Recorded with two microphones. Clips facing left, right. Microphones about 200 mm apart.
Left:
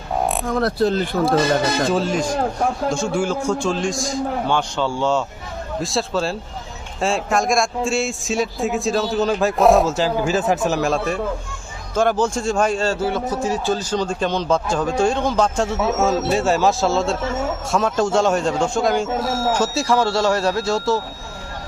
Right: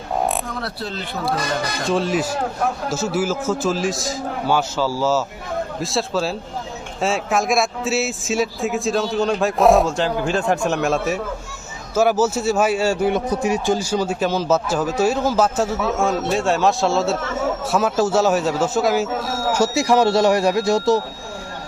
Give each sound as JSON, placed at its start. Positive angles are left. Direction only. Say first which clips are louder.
{"t": 0.4, "sound": "speech", "louder": "left 10 dB", "side_deg": 45}
{"t": 1.9, "sound": "a man's voice", "louder": "even", "side_deg": 0}
{"t": 19.3, "sound": "speech", "louder": "left 2 dB", "side_deg": 25}
{"t": 19.5, "sound": "a man's voice", "louder": "right 6 dB", "side_deg": -15}